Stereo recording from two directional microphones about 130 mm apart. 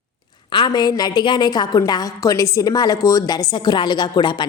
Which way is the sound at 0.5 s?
35° left (ahead or behind).